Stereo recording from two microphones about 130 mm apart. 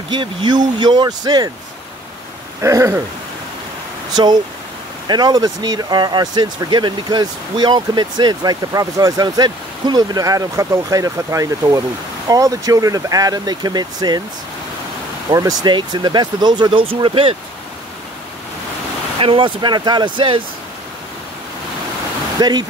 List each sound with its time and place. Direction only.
0.1 s speech: 35° right (ahead or behind)
2.6 s speech: 25° right (ahead or behind)
4.1 s speech: 35° right (ahead or behind)
15.2 s speech: 30° right (ahead or behind); by 17.4 s 45° right (ahead or behind)
19.1 s speech: 45° right (ahead or behind)
22.4 s speech: 30° right (ahead or behind)